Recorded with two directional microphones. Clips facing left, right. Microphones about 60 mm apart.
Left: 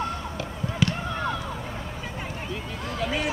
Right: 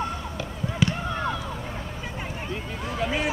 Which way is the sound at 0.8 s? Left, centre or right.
Centre.